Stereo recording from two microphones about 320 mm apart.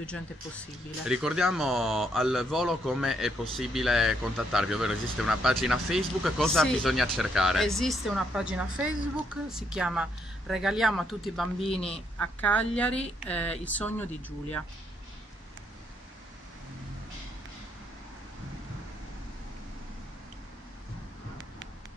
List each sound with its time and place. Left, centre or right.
1.0 s speech: centre
11.7 s a man's voice: centre
12.2 s speech: centre